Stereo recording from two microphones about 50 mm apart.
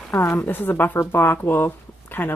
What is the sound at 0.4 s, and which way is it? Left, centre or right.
Speech, left.